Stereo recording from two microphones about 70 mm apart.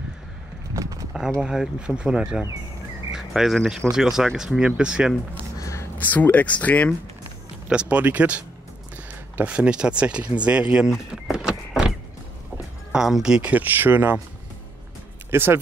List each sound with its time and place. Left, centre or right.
0.7 s a sound: right
1.4 s speech: centre
3.1 s a sound: centre
3.9 s speech: centre
5.6 s a sound: left
5.9 s speech: left
7.6 s speech: centre
9.4 s speech: centre
10.9 s power windows: centre
12.9 s speech: centre
13.4 s speech: right
15.3 s speech: right